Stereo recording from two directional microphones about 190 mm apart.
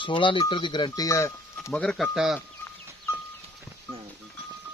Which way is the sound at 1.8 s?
Centre (ahead or behind).